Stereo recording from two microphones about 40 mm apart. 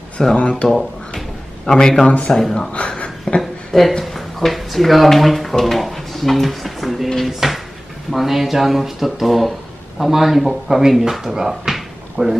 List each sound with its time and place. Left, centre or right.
0.4 s speech: left
0.7 s a man's voice: centre
2.0 s speech: left
2.4 s a man's voice: centre
2.7 s a sound: left
3.3 s a sound: centre
4.0 s speech: centre